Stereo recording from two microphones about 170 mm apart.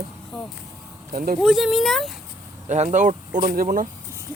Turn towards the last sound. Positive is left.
turn(degrees=-55)  # may be behind; listen again after turning